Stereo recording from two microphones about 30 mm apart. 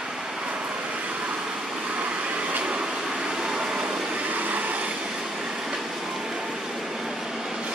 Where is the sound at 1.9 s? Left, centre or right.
Right.